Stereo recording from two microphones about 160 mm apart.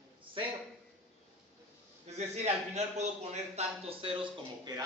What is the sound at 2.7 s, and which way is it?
A man's voice, 45° right (ahead or behind).